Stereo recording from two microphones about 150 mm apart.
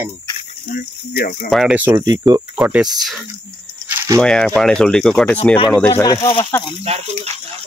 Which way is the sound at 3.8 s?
20° right (ahead or behind).